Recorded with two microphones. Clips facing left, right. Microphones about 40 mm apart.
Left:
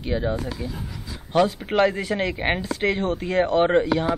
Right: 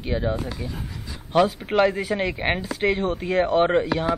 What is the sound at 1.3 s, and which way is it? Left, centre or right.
Speech, centre.